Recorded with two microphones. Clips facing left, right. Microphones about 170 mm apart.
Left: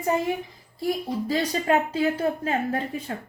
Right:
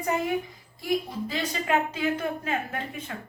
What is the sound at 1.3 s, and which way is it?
A woman's voice, 35° left (ahead or behind).